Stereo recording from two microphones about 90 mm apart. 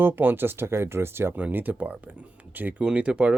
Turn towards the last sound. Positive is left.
turn(degrees=-10)  # may be behind; listen again after turning